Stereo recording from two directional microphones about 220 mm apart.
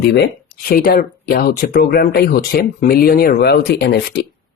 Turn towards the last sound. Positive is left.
turn(degrees=50)  # may be behind; listen again after turning